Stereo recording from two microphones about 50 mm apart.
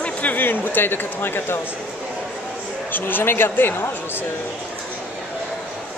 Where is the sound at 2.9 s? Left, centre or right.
Left.